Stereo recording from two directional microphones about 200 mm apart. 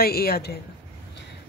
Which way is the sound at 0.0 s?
50° left (ahead or behind).